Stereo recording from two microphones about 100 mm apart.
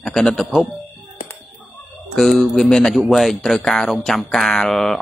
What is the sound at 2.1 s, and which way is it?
Speech, centre (ahead or behind).